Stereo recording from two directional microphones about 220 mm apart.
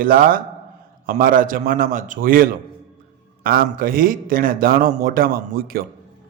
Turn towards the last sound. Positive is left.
turn(degrees=-40)  # may be behind; listen again after turning